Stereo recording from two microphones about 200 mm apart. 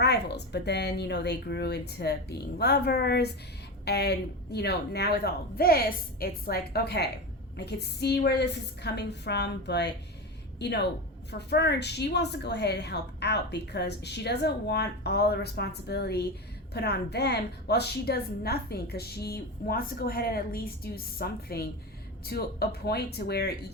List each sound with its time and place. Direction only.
0.0 s a woman's voice: 55° left (ahead or behind)